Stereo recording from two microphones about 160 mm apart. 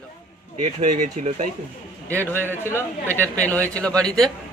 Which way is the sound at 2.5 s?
15° left (ahead or behind).